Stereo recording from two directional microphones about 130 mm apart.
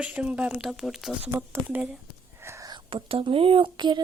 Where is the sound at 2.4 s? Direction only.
20° right (ahead or behind).